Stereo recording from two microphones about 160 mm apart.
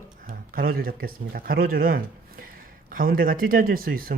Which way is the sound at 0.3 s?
65° right (ahead or behind).